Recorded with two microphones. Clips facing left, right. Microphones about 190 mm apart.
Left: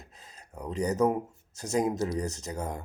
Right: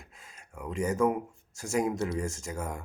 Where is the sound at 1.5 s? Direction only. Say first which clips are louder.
Left 1 dB; 20° left (ahead or behind).